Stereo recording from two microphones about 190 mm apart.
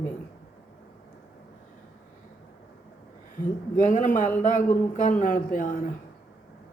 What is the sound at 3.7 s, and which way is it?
Speech, 45° left (ahead or behind).